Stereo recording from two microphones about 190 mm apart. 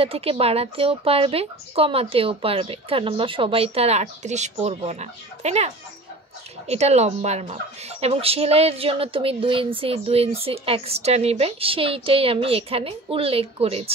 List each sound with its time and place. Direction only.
0.0 s speech: 30° right (ahead or behind)
6.7 s speech: 35° right (ahead or behind)